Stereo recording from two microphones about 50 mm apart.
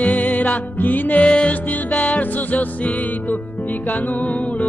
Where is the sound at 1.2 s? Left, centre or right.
Left.